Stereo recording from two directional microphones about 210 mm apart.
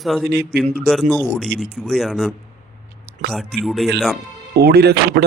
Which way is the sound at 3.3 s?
Centre (ahead or behind).